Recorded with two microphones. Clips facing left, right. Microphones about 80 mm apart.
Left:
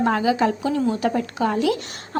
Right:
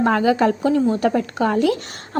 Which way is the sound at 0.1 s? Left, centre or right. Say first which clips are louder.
Right 3 dB; right.